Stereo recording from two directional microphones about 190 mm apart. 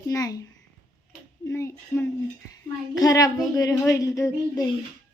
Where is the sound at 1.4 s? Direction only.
15° left (ahead or behind).